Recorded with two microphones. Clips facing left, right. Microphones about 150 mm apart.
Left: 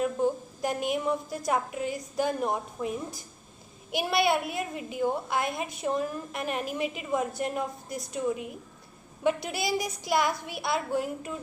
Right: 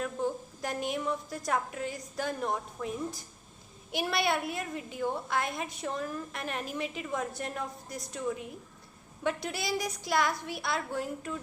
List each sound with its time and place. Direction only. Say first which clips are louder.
0.0 s a woman's voice: left 6 dB; 15° left (ahead or behind)